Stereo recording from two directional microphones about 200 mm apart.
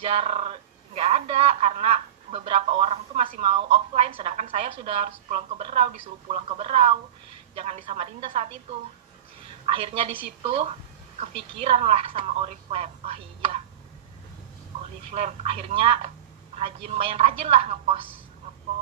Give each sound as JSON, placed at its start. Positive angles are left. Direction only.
{"t": 0.0, "sound": "a woman's voice", "side_deg": -30}
{"t": 9.7, "sound": "a woman's voice", "side_deg": -30}
{"t": 15.0, "sound": "a woman's voice", "side_deg": -30}